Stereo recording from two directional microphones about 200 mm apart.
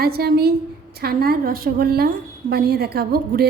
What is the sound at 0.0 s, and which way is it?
A woman's voice, 50° right (ahead or behind).